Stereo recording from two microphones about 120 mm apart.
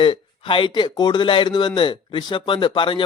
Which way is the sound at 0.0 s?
45° left (ahead or behind).